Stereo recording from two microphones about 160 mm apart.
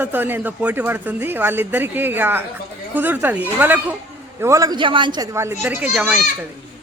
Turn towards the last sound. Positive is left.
turn(degrees=-10)  # may be behind; listen again after turning